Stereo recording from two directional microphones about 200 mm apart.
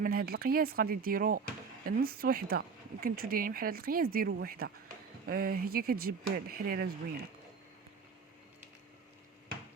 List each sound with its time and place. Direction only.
0.0 s speech: 50° right (ahead or behind)